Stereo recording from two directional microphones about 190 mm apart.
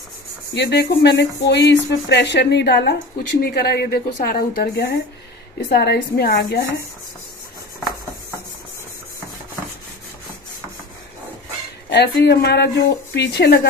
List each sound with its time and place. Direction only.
0.6 s a woman's voice: 60° left (ahead or behind)
11.9 s speech: 65° left (ahead or behind)